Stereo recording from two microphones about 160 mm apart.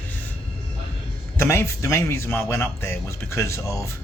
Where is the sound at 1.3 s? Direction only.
15° left (ahead or behind).